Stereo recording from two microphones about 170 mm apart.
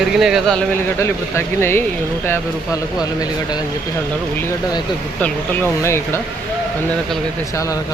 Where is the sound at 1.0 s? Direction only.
15° left (ahead or behind).